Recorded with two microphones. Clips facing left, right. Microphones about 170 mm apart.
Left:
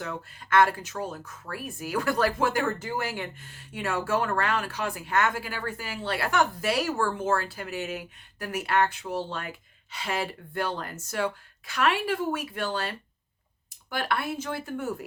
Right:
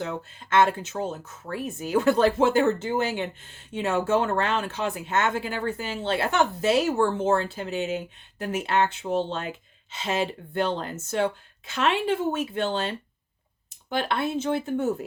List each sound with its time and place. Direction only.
0.0 s speech: 25° right (ahead or behind)